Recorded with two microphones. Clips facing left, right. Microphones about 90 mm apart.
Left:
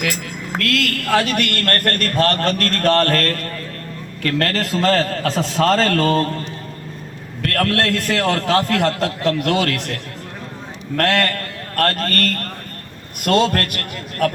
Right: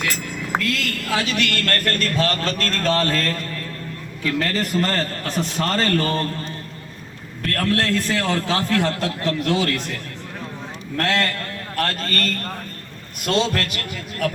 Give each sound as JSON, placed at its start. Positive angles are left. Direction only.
{"t": 0.6, "sound": "a man's voice", "side_deg": 65}
{"t": 7.4, "sound": "a man's voice", "side_deg": 75}
{"t": 8.2, "sound": "a man's voice", "side_deg": 60}
{"t": 10.9, "sound": "a man's voice", "side_deg": 60}